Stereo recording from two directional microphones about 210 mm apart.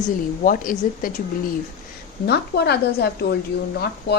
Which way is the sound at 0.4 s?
40° left (ahead or behind).